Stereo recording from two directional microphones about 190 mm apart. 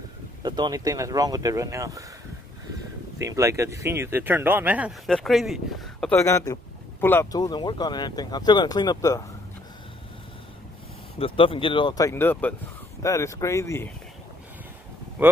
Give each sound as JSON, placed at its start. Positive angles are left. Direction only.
{"t": 0.4, "sound": "speech", "side_deg": -20}
{"t": 3.2, "sound": "speech", "side_deg": -15}
{"t": 6.1, "sound": "speech", "side_deg": 15}
{"t": 11.1, "sound": "speech", "side_deg": 30}